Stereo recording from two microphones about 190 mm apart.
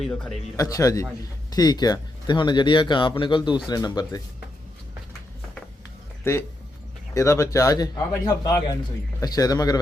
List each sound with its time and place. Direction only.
0.0 s a man's voice: 5° left (ahead or behind)
0.5 s speech: 15° left (ahead or behind)
6.3 s speech: 10° left (ahead or behind)